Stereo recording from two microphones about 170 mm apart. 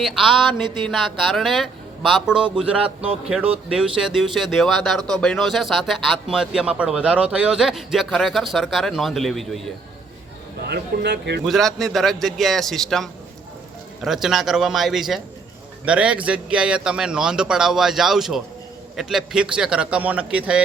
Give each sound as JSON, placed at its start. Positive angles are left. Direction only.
{"t": 0.0, "sound": "speech", "side_deg": 0}
{"t": 10.6, "sound": "speech", "side_deg": -70}
{"t": 11.4, "sound": "speech", "side_deg": 0}